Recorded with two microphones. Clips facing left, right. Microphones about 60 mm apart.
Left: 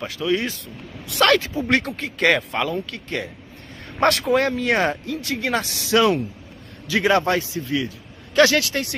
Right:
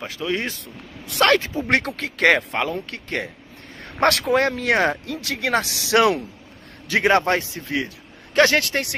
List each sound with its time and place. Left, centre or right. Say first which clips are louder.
0.3 s speech: left 4 dB; right
1.7 s speech: even; right
6.9 s a man's voice: right 1 dB; right
8.4 s a man's voice: even; right